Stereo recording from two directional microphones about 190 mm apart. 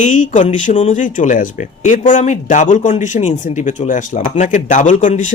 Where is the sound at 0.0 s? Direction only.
40° left (ahead or behind).